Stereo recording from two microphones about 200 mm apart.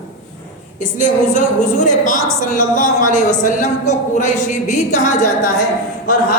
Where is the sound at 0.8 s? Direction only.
40° left (ahead or behind).